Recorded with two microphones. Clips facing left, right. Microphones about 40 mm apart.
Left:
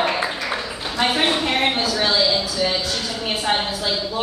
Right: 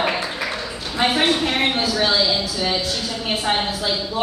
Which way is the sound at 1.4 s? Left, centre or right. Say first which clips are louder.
Even; centre.